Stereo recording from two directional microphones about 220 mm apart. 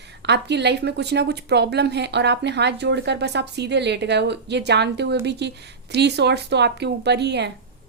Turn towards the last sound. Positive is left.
turn(degrees=-50)  # may be behind; listen again after turning